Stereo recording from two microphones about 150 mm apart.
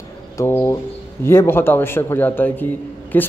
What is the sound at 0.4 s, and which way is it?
A man's voice, 20° left (ahead or behind).